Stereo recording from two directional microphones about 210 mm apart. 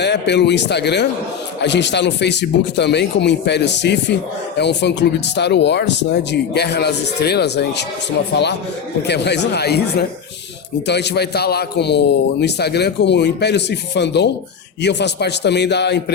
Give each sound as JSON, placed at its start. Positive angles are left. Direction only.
{"t": 0.0, "sound": "a man's voice", "side_deg": 55}
{"t": 9.0, "sound": "a man's voice", "side_deg": 55}